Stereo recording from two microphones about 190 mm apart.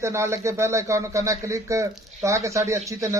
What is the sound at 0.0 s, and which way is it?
Speech, 15° right (ahead or behind).